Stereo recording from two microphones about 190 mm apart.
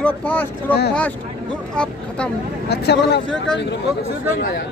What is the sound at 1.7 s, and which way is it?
Vehicle, 5° left (ahead or behind).